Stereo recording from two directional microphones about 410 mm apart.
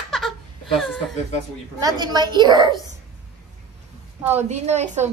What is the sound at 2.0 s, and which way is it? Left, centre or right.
Speech, centre.